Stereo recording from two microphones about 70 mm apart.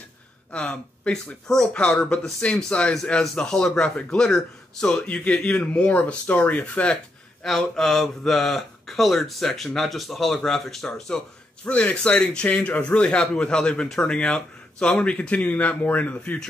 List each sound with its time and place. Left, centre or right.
0.5 s speech: centre
11.6 s speech: centre